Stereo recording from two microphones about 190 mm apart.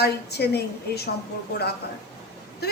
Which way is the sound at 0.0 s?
60° left (ahead or behind).